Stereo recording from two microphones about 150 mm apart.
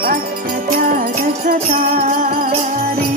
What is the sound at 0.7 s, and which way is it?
Music, 65° right (ahead or behind).